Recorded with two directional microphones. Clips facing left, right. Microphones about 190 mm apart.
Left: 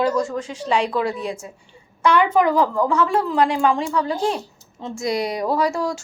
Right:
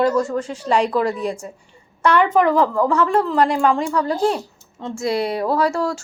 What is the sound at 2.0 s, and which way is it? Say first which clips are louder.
A woman's voice: right 1 dB; 10° left (ahead or behind).